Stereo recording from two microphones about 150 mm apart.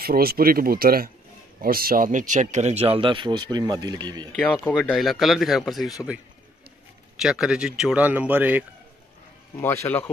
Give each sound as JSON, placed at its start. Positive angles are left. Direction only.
{"t": 0.0, "sound": "speech", "side_deg": -90}
{"t": 4.9, "sound": "speech", "side_deg": 0}
{"t": 7.2, "sound": "a man's voice", "side_deg": -5}
{"t": 9.6, "sound": "speech", "side_deg": 15}